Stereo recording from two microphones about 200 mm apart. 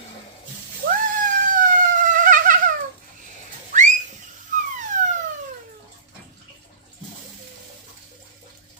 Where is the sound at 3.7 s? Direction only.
40° right (ahead or behind).